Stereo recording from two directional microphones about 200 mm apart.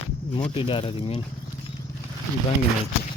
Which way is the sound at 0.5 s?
25° left (ahead or behind).